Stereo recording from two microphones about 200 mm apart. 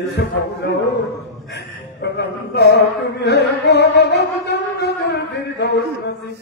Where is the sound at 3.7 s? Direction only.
55° left (ahead or behind).